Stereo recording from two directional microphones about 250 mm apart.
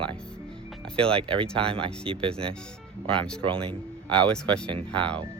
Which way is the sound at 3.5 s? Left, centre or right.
Right.